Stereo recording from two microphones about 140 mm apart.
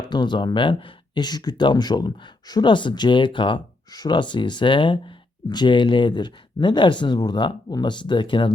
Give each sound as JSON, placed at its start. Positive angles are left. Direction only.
{"t": 0.0, "sound": "speech", "side_deg": 30}